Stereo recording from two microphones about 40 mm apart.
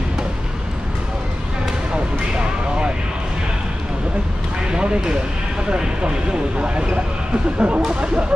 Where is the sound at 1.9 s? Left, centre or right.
Right.